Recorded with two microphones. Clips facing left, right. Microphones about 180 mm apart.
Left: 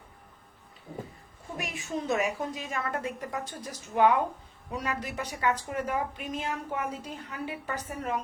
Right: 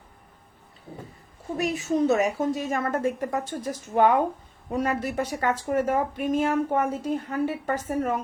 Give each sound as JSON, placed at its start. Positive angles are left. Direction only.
{"t": 1.5, "sound": "a woman's voice", "side_deg": -40}